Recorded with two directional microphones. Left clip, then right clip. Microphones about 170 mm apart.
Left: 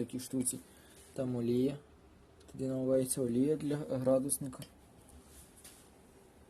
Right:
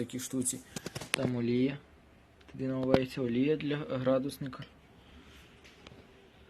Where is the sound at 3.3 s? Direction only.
20° left (ahead or behind).